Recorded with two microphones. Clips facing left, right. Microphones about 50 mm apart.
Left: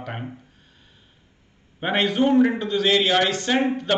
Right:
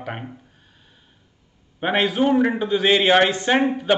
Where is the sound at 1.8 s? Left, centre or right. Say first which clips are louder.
Right 1 dB; centre.